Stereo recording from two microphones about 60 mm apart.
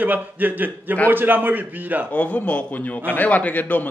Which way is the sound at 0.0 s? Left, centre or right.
Right.